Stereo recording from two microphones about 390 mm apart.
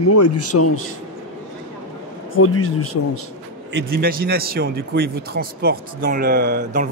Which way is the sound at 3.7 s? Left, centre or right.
Right.